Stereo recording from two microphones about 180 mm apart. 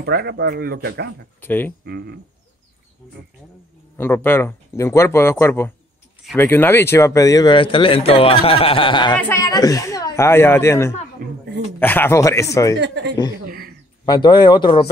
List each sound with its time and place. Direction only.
0.0 s speech: 65° right (ahead or behind)
1.4 s speech: 10° left (ahead or behind)
1.9 s speech: 65° right (ahead or behind)
3.9 s speech: 10° left (ahead or behind)
11.2 s speech: 55° right (ahead or behind)
11.8 s speech: 10° left (ahead or behind)
12.8 s speech: 75° right (ahead or behind)
14.0 s speech: 25° left (ahead or behind)